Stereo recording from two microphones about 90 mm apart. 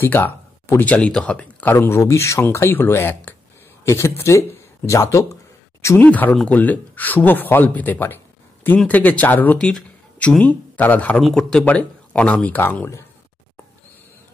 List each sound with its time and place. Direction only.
0.0 s speech: 20° left (ahead or behind)
2.4 s speech: 25° left (ahead or behind)
5.9 s speech: 20° left (ahead or behind)
9.6 s speech: 10° left (ahead or behind)
11.1 s speech: centre (ahead or behind)
11.5 s speech: 15° left (ahead or behind)